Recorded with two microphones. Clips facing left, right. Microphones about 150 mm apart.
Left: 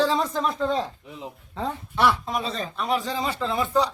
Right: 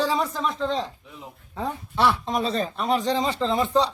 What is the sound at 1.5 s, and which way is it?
Speech, 15° right (ahead or behind).